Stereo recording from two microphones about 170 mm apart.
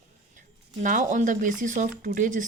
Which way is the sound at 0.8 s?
50° right (ahead or behind).